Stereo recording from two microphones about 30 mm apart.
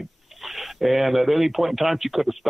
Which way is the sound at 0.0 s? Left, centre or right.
Centre.